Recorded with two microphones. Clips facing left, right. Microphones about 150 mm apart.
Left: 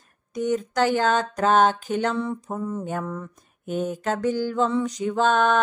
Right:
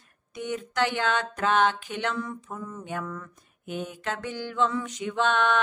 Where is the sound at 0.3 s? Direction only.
40° left (ahead or behind).